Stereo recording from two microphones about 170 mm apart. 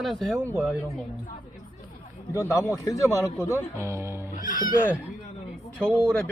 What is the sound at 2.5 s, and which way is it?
Speech, 20° left (ahead or behind).